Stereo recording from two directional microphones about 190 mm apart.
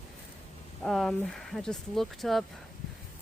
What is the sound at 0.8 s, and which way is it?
Speech, centre (ahead or behind).